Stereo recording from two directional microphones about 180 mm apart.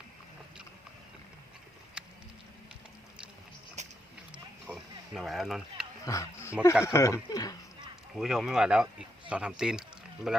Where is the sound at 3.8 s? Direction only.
40° right (ahead or behind).